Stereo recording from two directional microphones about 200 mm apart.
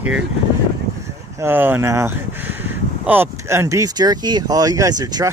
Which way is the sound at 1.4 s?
10° right (ahead or behind).